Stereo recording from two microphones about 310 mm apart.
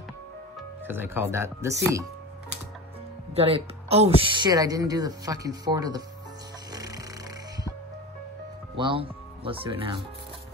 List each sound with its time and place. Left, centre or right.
0.8 s speech: centre
3.3 s speech: centre
6.7 s music: centre
8.7 s speech: centre